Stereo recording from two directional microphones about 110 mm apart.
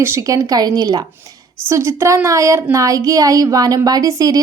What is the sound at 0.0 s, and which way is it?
A woman's voice, 25° right (ahead or behind).